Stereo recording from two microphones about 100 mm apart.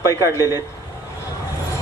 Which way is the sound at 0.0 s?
30° left (ahead or behind).